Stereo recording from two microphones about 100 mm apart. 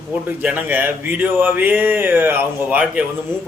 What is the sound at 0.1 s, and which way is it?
Speech, 15° right (ahead or behind).